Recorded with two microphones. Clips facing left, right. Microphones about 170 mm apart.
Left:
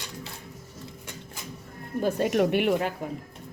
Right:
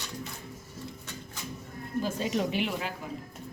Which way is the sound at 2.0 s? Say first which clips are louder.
Left 7 dB; 60° left (ahead or behind).